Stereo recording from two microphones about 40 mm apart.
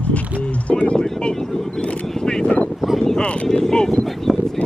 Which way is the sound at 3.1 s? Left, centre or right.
Left.